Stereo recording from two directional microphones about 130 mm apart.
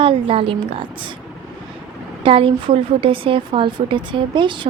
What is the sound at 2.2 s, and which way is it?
Speech, 45° right (ahead or behind).